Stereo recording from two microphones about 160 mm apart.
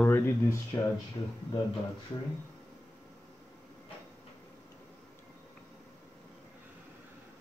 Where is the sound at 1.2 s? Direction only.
30° left (ahead or behind).